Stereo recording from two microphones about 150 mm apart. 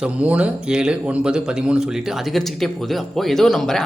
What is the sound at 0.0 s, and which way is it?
A man's voice, 10° right (ahead or behind).